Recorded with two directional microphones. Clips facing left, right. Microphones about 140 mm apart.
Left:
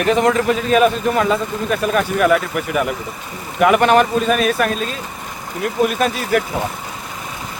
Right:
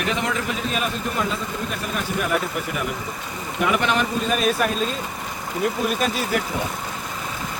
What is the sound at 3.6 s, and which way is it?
A man's voice, 55° left (ahead or behind).